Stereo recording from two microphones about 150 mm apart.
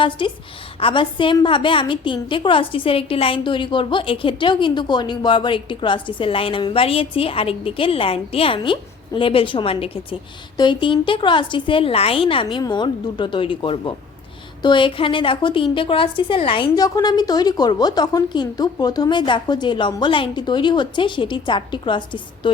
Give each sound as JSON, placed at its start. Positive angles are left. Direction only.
{"t": 0.2, "sound": "a woman's voice", "side_deg": 35}